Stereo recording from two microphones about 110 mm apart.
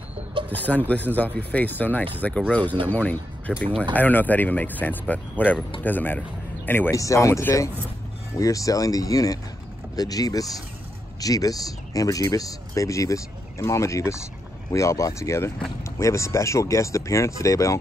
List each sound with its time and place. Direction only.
0.5 s speech: 15° left (ahead or behind)